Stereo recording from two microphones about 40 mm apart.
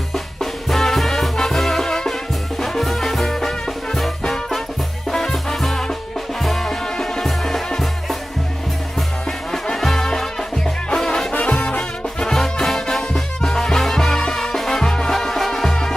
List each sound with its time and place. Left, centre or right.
0.1 s music: centre
9.5 s music: centre
11.3 s music: left
12.2 s music: centre